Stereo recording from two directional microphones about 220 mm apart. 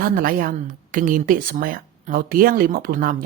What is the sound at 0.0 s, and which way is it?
Speech, 40° right (ahead or behind).